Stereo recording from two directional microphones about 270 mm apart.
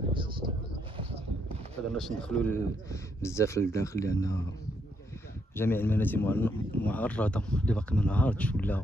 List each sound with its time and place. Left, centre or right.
0.1 s a sound: centre
2.0 s speech: centre
5.6 s speech: centre